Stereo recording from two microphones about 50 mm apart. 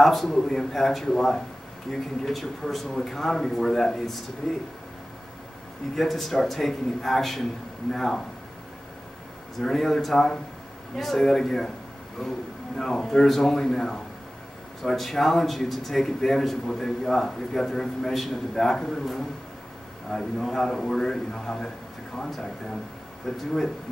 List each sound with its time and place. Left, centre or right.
0.0 s speech: centre
5.9 s speech: centre
9.6 s a man's voice: centre